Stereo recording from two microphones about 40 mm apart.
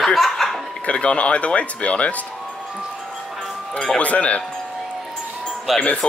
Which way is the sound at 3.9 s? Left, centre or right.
Left.